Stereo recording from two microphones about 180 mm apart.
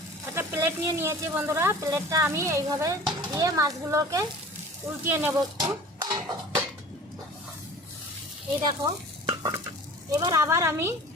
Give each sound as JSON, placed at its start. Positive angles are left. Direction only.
{"t": 0.3, "sound": "speech", "side_deg": -15}
{"t": 8.6, "sound": "stir", "side_deg": -25}
{"t": 10.1, "sound": "speech", "side_deg": -20}